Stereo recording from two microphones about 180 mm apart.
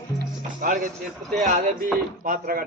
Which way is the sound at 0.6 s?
50° right (ahead or behind).